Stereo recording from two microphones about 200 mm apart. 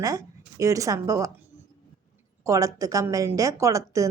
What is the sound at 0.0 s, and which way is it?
A woman's voice, 15° right (ahead or behind).